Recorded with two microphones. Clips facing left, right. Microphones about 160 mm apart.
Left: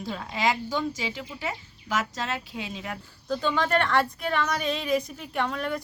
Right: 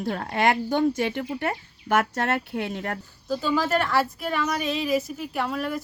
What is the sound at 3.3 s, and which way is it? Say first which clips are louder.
A woman's voice: right 2 dB; 5° right (ahead or behind).